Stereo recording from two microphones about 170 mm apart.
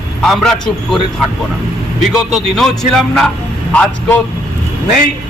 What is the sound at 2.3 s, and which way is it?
A man's voice, centre (ahead or behind).